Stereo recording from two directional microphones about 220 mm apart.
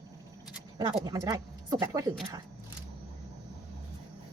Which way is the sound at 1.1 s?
15° right (ahead or behind).